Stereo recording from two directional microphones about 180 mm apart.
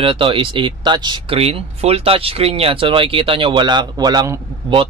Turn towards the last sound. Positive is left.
turn(degrees=-25)  # may be behind; listen again after turning